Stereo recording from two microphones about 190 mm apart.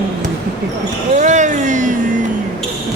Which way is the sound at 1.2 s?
40° right (ahead or behind).